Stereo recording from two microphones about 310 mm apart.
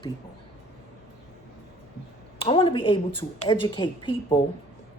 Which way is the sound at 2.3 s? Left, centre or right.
Centre.